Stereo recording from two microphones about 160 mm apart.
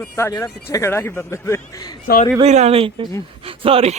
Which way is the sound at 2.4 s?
45° right (ahead or behind).